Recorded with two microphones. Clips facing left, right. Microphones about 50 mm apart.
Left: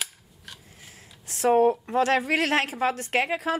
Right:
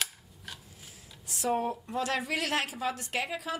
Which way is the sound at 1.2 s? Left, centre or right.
Left.